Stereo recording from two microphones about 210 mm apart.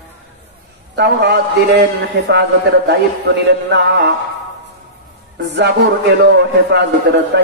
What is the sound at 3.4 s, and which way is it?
Speech, 55° right (ahead or behind).